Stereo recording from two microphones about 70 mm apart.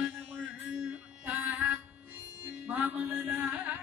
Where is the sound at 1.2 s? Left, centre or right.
Right.